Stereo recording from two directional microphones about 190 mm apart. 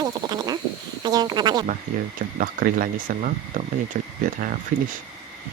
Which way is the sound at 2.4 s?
45° right (ahead or behind).